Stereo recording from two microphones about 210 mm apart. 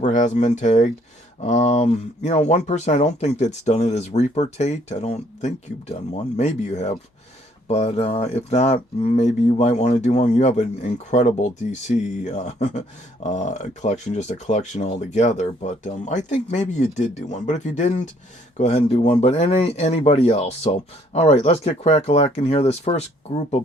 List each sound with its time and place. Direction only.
0.0 s speech: 35° left (ahead or behind)